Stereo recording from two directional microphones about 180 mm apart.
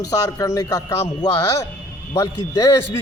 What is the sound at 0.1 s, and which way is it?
A man's voice, 20° left (ahead or behind).